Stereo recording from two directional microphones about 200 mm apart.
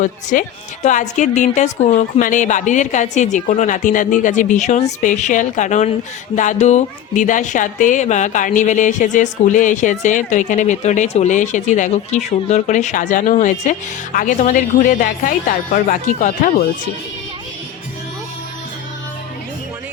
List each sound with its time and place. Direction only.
0.0 s speech: 40° left (ahead or behind)